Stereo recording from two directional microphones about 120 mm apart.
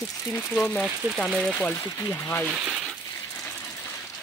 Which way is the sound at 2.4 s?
10° right (ahead or behind).